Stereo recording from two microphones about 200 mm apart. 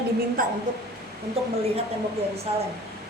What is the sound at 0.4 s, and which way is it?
Speech, 45° right (ahead or behind).